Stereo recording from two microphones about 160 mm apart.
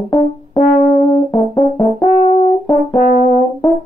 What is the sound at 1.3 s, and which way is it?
Brass instrument, 20° left (ahead or behind).